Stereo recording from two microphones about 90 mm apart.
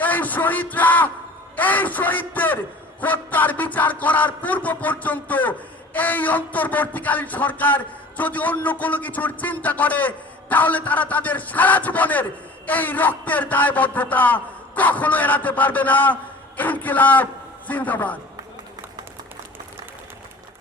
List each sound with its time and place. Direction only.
0.0 s a man's voice: 20° left (ahead or behind)